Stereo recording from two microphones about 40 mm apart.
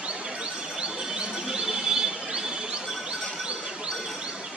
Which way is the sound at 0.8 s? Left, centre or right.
Centre.